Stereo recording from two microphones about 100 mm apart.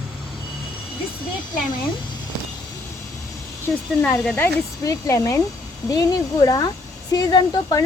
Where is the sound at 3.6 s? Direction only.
20° left (ahead or behind).